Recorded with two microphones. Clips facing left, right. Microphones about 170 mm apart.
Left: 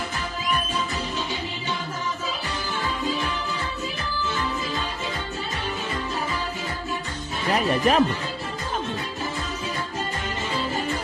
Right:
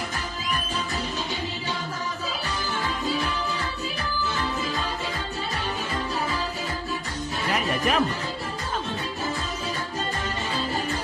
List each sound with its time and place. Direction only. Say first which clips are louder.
7.5 s speech: left 5 dB; 35° left (ahead or behind)